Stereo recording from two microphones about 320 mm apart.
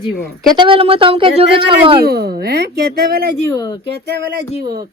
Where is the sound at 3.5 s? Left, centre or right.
Centre.